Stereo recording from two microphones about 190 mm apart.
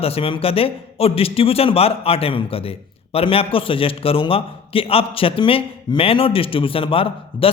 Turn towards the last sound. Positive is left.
turn(degrees=30)  # may be behind; listen again after turning